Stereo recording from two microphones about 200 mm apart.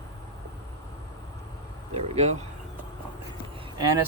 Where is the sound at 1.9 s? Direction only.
30° right (ahead or behind).